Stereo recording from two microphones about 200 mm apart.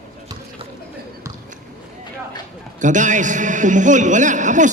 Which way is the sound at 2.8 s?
40° right (ahead or behind).